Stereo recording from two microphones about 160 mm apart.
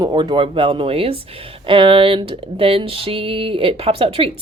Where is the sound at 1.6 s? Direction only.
30° right (ahead or behind).